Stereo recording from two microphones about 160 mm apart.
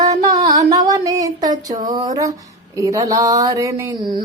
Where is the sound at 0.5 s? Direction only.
20° right (ahead or behind).